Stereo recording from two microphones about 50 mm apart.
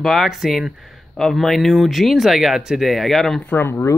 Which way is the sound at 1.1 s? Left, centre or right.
Centre.